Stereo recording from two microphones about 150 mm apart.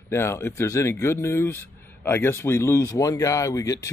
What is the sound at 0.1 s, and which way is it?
Speech, 15° left (ahead or behind).